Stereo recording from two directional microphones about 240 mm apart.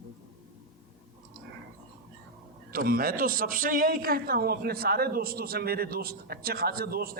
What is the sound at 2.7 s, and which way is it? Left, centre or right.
A man's voice, right.